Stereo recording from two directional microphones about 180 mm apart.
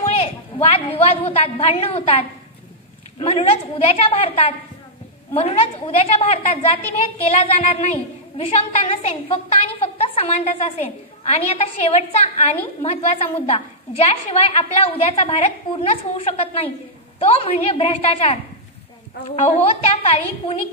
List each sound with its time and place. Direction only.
0.2 s a woman's voice: 35° left (ahead or behind)